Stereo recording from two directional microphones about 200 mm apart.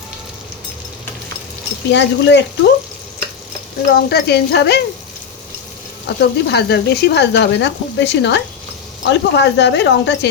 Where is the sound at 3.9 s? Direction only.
55° left (ahead or behind).